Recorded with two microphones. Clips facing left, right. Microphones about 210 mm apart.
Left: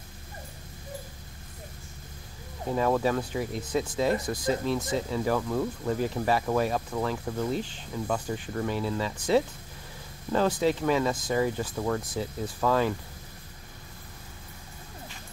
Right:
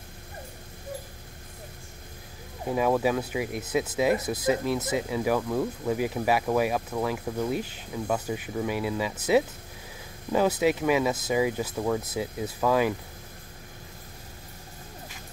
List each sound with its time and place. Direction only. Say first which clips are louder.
2.6 s speech: right 1 dB; 10° right (ahead or behind)
4.7 s speech: right 1 dB; 20° right (ahead or behind)
5.1 s speech: right 1 dB; 10° right (ahead or behind)
10.3 s speech: right 2 dB; 10° right (ahead or behind)